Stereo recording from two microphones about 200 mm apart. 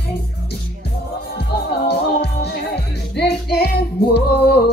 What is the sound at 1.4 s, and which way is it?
Music, 55° left (ahead or behind).